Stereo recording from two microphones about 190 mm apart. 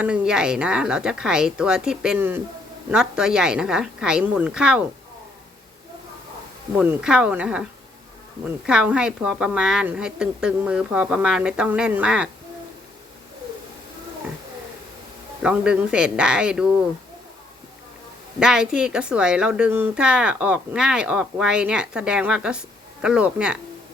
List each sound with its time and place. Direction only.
0.0 s a woman's voice: 5° right (ahead or behind)
6.7 s a woman's voice: 5° right (ahead or behind)
8.6 s a woman's voice: 5° right (ahead or behind)
15.4 s a woman's voice: 5° right (ahead or behind)
18.3 s a woman's voice: 5° right (ahead or behind)